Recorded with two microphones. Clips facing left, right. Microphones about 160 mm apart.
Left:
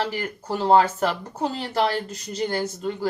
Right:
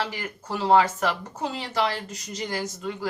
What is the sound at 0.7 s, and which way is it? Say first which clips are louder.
Speech: left 2 dB; 35° left (ahead or behind).